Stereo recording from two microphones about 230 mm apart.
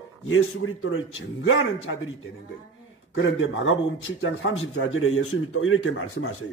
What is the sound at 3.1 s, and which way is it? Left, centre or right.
A man's voice, left.